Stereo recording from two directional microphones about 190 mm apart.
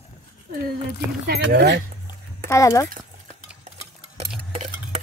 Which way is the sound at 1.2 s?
60° right (ahead or behind).